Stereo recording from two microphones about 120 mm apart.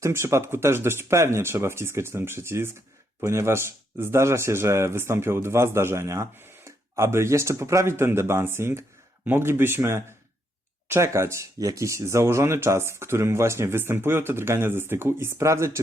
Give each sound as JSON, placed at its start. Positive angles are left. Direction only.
{"t": 0.0, "sound": "speech", "side_deg": -25}